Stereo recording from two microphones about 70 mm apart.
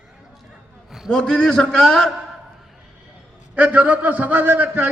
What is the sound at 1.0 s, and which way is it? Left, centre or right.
A man's voice, centre.